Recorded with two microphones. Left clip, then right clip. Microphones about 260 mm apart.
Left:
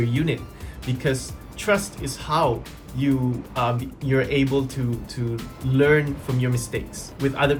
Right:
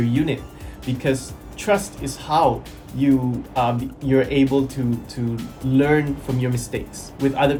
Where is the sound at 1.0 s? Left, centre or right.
Centre.